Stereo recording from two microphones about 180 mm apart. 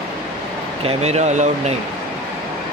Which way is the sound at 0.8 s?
40° right (ahead or behind).